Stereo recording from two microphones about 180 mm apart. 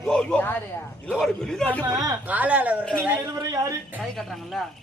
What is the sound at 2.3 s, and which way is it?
A man's voice, 10° right (ahead or behind).